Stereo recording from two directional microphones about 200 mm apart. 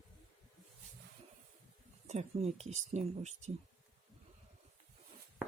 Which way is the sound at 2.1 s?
30° right (ahead or behind).